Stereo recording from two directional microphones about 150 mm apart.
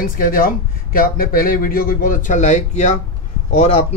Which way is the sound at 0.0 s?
70° left (ahead or behind).